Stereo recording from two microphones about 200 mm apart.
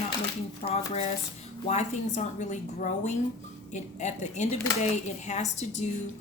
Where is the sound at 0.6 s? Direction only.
30° left (ahead or behind).